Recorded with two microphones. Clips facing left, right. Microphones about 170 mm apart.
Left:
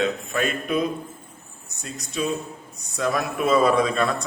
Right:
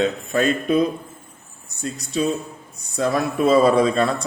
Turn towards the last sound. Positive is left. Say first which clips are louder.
# right 4 dB
turn(degrees=-30)  # may be behind; listen again after turning